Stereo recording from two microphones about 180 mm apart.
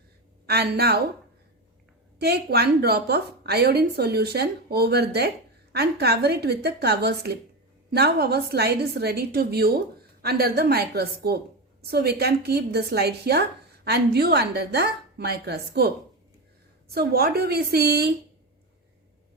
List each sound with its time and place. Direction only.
0.4 s a woman's voice: 65° right (ahead or behind)
2.1 s a woman's voice: 65° right (ahead or behind)
16.9 s a woman's voice: 60° right (ahead or behind)